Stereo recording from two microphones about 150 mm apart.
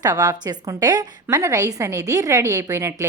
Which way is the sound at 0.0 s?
25° right (ahead or behind).